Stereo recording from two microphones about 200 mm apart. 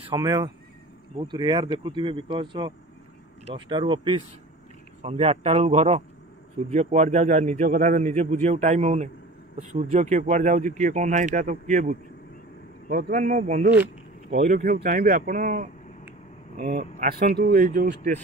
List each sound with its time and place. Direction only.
0.1 s speech: 20° right (ahead or behind); by 13.7 s 40° right (ahead or behind)
14.3 s a man's voice: 50° right (ahead or behind)